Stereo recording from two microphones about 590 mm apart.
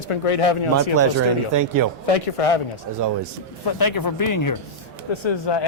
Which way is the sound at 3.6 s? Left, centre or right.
Left.